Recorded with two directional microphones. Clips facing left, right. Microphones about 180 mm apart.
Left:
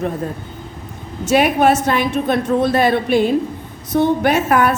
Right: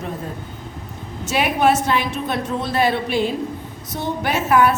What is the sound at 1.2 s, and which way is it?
A woman's voice, 50° left (ahead or behind).